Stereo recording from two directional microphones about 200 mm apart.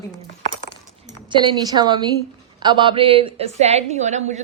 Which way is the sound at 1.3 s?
25° right (ahead or behind).